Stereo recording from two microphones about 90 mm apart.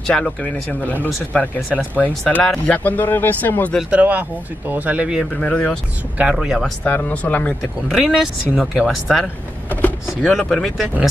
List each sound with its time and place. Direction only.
0.0 s speech: 10° left (ahead or behind)
3.9 s speech: 15° right (ahead or behind)
5.2 s speech: 10° left (ahead or behind)
6.3 s speech: 5° right (ahead or behind)
6.6 s speech: 15° left (ahead or behind)
7.9 s speech: 5° right (ahead or behind)
9.2 s power windows: 20° left (ahead or behind)
10.2 s speech: 5° left (ahead or behind)